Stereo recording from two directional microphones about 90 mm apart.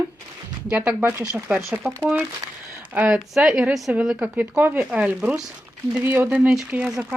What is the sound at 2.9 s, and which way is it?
Speech, 15° right (ahead or behind).